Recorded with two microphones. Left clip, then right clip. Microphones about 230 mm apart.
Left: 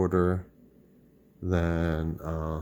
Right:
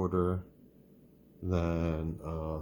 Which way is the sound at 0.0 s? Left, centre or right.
Left.